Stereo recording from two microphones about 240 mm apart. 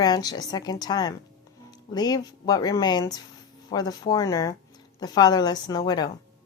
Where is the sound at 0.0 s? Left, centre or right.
Centre.